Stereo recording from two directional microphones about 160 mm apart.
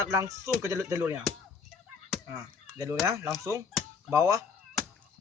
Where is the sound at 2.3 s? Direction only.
20° right (ahead or behind).